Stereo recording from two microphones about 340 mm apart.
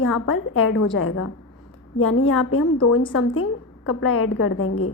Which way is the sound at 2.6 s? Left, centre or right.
Left.